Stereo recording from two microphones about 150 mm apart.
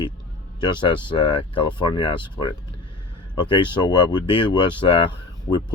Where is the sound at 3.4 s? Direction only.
30° left (ahead or behind).